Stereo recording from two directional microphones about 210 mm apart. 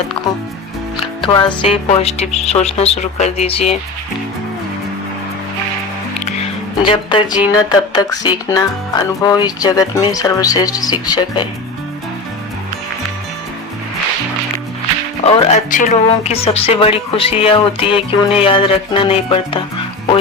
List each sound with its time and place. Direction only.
1.2 s speech: 25° left (ahead or behind)
6.8 s speech: 25° left (ahead or behind)
15.4 s speech: 35° left (ahead or behind)